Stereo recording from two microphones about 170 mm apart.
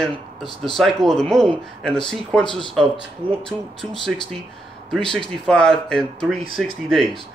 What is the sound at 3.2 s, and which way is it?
Speech, 30° right (ahead or behind).